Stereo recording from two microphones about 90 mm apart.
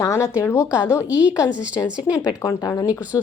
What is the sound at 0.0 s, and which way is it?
A woman's voice, 30° left (ahead or behind).